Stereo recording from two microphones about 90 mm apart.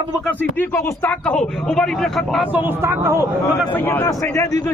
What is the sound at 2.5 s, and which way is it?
Speech, 25° right (ahead or behind).